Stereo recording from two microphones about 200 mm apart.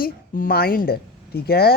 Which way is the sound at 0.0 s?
45° left (ahead or behind).